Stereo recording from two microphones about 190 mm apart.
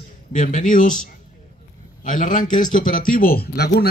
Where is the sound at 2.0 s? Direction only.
45° left (ahead or behind).